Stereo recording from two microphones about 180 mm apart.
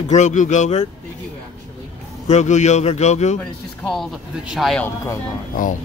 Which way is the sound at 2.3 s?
40° left (ahead or behind).